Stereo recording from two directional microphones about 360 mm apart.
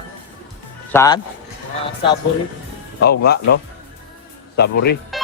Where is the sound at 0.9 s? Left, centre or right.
Centre.